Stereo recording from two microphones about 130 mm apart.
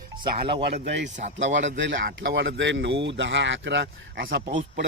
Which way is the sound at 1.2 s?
85° right.